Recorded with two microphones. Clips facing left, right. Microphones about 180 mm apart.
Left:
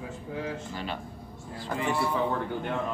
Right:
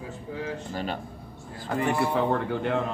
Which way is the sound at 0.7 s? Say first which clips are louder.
Right 4 dB; 45° right (ahead or behind).